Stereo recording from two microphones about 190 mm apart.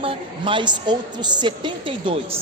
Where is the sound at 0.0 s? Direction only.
25° right (ahead or behind).